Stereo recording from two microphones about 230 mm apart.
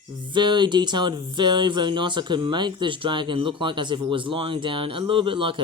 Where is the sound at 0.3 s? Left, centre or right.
Centre.